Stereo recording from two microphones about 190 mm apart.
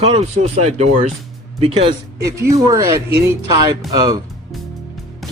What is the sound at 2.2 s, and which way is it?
Speech, 15° right (ahead or behind).